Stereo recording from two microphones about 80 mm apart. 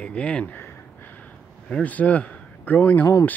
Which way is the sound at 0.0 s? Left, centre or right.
Centre.